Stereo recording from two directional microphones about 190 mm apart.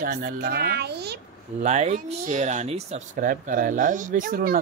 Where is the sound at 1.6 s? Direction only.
35° right (ahead or behind).